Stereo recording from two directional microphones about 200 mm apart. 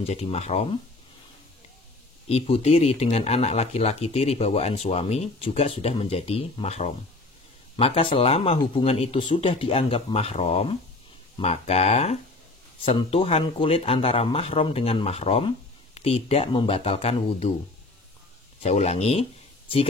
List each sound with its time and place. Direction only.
0.0 s speech: 30° left (ahead or behind)
2.2 s speech: 30° left (ahead or behind)
18.6 s speech: 35° left (ahead or behind)